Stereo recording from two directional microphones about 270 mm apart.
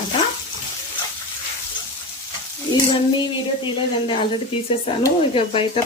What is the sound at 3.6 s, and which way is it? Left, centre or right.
Speech, centre.